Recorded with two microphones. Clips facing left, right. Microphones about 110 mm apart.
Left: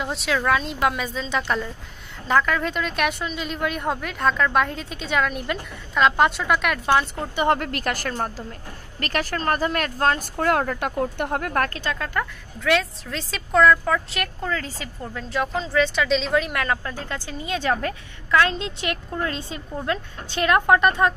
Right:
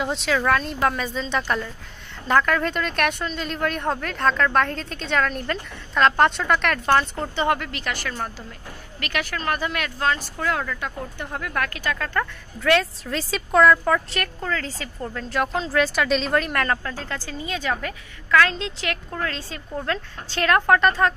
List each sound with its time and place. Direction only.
0.0 s a woman's voice: centre (ahead or behind)
7.4 s a woman's voice: 40° left (ahead or behind)
11.8 s a woman's voice: 25° left (ahead or behind)
12.5 s a woman's voice: centre (ahead or behind)
16.8 s a woman's voice: 20° left (ahead or behind)
17.5 s a woman's voice: 30° left (ahead or behind); by 21.1 s 15° left (ahead or behind)